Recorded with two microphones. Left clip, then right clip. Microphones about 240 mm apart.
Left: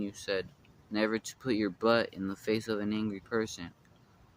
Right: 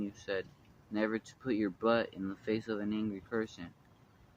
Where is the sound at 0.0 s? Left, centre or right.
Left.